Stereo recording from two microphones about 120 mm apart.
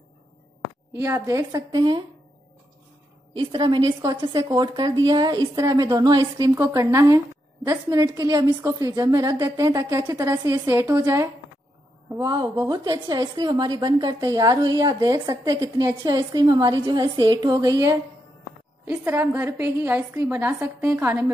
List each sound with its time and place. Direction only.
0.9 s a woman's voice: 25° right (ahead or behind); by 2.0 s 40° right (ahead or behind)
3.3 s a woman's voice: 40° right (ahead or behind); by 11.2 s 25° right (ahead or behind)
12.2 s a woman's voice: 35° right (ahead or behind)